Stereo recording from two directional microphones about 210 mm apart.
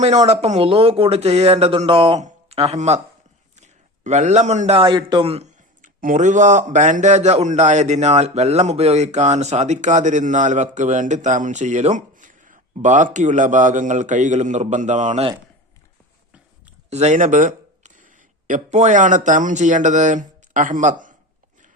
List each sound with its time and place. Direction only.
0.0 s a man's voice: 30° right (ahead or behind)
16.9 s speech: 30° right (ahead or behind)